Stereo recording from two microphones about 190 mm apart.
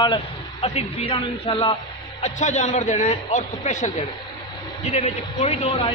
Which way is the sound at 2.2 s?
35° left (ahead or behind).